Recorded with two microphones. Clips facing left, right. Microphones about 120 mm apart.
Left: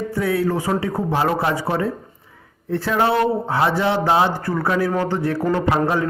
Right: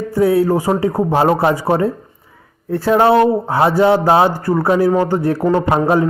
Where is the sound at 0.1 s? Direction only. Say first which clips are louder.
Right 9 dB; 35° right (ahead or behind).